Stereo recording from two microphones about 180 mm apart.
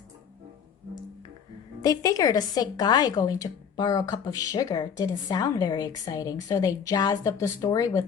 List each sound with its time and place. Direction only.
1.8 s a woman's voice: 20° left (ahead or behind)